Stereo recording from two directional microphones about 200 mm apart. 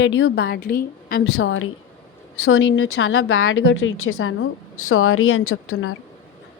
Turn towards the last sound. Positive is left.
turn(degrees=90)